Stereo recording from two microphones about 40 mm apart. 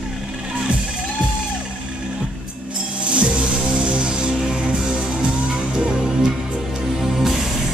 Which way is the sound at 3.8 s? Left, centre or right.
Right.